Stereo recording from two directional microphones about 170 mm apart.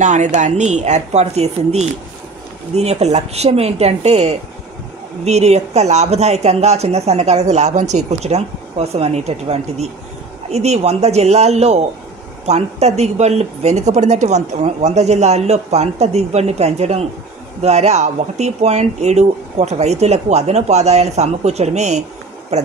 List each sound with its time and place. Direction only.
0.0 s speech: 45° right (ahead or behind)